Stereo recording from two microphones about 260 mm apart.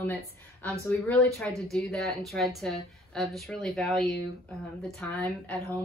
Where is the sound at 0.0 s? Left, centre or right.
Centre.